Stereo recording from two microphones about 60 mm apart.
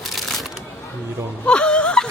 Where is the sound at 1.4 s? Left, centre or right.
Centre.